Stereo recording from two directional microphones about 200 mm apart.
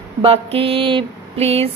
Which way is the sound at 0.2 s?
30° right (ahead or behind).